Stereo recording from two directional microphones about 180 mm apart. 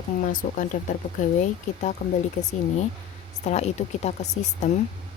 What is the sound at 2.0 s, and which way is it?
Speech, 65° left (ahead or behind).